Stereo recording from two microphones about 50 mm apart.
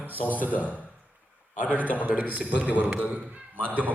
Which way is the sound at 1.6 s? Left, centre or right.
Right.